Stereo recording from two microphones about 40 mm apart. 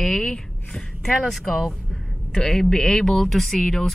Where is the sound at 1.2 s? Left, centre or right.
Centre.